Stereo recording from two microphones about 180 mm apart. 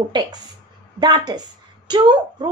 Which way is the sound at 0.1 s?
25° right (ahead or behind).